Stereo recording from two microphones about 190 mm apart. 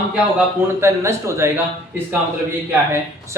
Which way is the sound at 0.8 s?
15° right (ahead or behind).